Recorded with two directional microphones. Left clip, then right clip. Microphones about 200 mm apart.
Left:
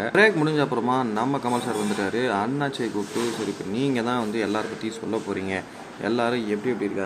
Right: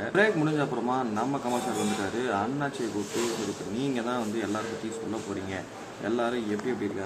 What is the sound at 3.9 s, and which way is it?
Speech, 30° left (ahead or behind).